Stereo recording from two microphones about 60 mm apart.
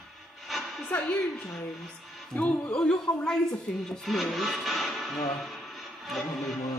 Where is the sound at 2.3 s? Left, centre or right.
Left.